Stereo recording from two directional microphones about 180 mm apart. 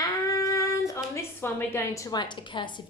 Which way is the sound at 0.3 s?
20° left (ahead or behind).